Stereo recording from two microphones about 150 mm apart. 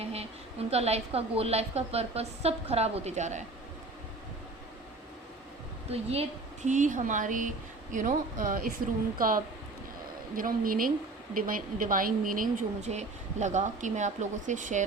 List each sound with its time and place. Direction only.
0.0 s a sound: 40° right (ahead or behind)
0.7 s a woman's voice: 45° right (ahead or behind)
5.9 s a woman's voice: 40° right (ahead or behind)
6.7 s a woman's voice: 55° right (ahead or behind)